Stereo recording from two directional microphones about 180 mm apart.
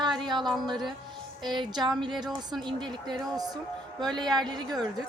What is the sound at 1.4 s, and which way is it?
Speech, 25° right (ahead or behind).